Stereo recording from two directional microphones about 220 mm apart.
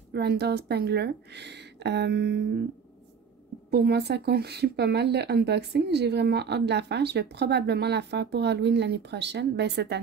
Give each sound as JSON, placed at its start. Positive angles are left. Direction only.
{"t": 0.1, "sound": "speech", "side_deg": -50}
{"t": 3.7, "sound": "speech", "side_deg": -50}